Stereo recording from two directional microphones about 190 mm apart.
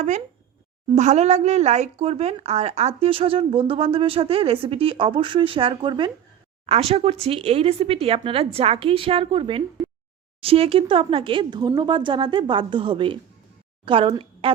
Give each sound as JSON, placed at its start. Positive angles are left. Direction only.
{"t": 0.9, "sound": "a woman's voice", "side_deg": -35}